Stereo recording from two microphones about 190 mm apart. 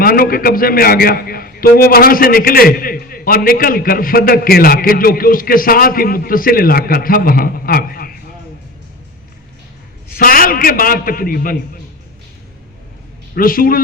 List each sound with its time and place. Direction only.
0.0 s a man's voice: 50° left (ahead or behind)
10.1 s a man's voice: 50° left (ahead or behind)
13.3 s a man's voice: 50° left (ahead or behind)